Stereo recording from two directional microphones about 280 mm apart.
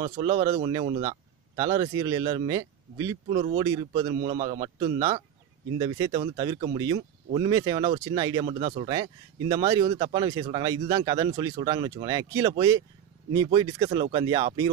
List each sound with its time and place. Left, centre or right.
0.2 s speech: centre